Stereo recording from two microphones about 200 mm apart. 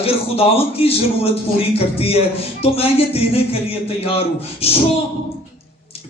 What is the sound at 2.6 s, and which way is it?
Music, 30° left (ahead or behind).